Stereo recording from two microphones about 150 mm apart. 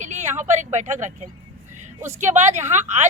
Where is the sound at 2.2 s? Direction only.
50° right (ahead or behind).